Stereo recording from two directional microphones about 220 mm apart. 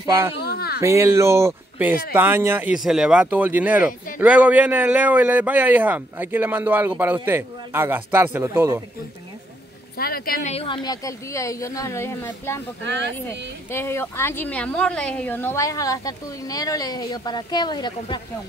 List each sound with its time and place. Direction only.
0.0 s speech: 10° right (ahead or behind)
0.4 s a sound: 45° left (ahead or behind)
0.7 s speech: 10° right (ahead or behind)
9.9 s speech: 45° left (ahead or behind)
10.5 s a woman's voice: 25° left (ahead or behind)
12.8 s speech: 55° right (ahead or behind)
13.7 s a woman's voice: 10° left (ahead or behind)